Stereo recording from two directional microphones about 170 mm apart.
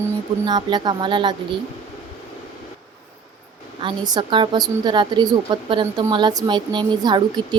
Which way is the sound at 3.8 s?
25° right (ahead or behind).